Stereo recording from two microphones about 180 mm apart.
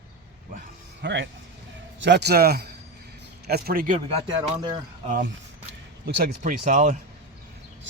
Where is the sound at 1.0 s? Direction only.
80° right.